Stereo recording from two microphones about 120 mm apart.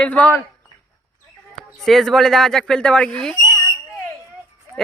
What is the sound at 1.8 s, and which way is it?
Speech, centre (ahead or behind).